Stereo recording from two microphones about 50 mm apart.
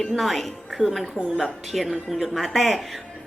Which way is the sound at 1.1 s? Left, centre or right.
Centre.